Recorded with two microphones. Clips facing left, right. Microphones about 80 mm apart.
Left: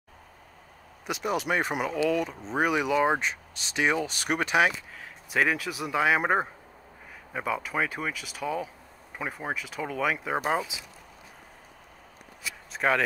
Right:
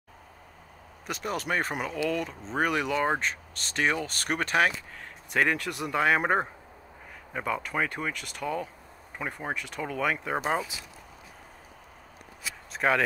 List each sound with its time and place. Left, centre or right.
1.0 s speech: centre
12.7 s speech: centre